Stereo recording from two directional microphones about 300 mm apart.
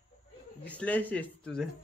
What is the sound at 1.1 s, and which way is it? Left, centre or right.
Speech, centre.